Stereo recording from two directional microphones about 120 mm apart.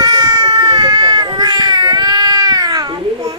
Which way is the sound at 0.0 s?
35° right (ahead or behind).